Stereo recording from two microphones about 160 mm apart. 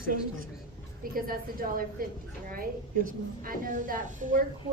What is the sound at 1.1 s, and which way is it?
A woman's voice, 65° right (ahead or behind).